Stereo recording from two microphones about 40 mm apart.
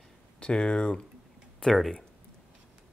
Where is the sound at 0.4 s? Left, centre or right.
Left.